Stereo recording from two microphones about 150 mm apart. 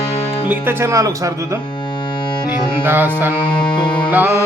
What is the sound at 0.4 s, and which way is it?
Speech, 15° right (ahead or behind).